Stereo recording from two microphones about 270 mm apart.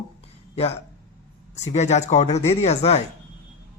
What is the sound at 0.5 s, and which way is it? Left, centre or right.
Speech, left.